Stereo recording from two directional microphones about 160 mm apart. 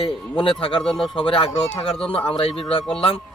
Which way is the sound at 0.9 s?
Centre (ahead or behind).